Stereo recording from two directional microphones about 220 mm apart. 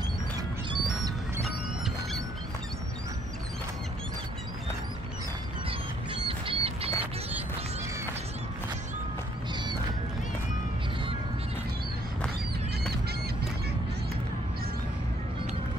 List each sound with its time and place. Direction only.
0.7 s music: 15° right (ahead or behind)
6.2 s bird flight: 25° right (ahead or behind)